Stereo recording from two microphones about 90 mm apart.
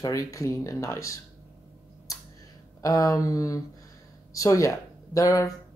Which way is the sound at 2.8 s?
40° left (ahead or behind).